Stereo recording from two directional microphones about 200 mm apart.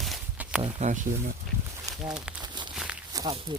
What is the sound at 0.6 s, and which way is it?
Speech, 35° right (ahead or behind).